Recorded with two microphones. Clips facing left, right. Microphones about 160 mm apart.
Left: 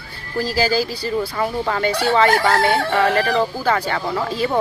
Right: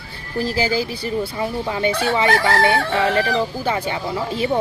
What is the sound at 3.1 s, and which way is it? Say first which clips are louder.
Speech: left 1 dB; 20° right (ahead or behind).